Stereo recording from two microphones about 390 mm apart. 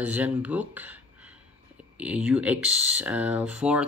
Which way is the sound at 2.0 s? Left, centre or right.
Centre.